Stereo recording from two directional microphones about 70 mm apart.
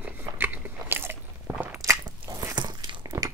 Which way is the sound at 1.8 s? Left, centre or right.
Right.